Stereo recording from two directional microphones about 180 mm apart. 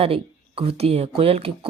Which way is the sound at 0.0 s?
30° right (ahead or behind).